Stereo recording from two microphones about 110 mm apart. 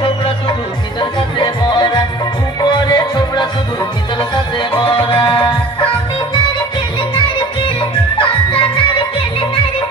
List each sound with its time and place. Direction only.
1.4 s music: 40° left (ahead or behind)
4.7 s music: 55° left (ahead or behind)
8.2 s music: 50° left (ahead or behind)